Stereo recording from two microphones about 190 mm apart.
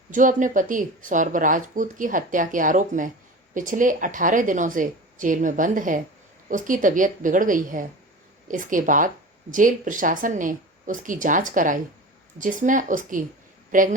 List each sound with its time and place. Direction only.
0.1 s speech: 45° right (ahead or behind)